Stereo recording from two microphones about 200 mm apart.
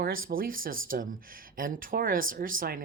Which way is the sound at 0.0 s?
45° right (ahead or behind).